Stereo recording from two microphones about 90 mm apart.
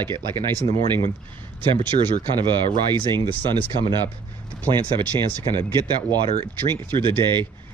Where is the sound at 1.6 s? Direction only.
60° right (ahead or behind).